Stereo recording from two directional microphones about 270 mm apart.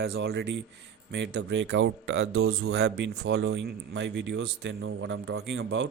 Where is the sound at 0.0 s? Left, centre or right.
Right.